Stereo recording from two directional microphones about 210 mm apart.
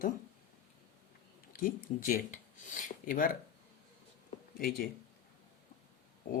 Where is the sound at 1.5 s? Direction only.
40° left (ahead or behind).